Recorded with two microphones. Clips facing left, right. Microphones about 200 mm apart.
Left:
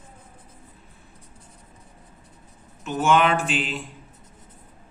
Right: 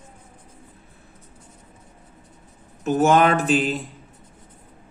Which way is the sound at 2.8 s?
40° right (ahead or behind).